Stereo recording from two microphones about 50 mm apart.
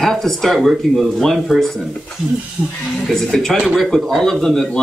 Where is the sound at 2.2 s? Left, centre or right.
Centre.